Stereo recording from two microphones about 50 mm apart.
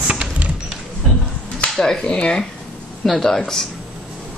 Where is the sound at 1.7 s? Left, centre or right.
Centre.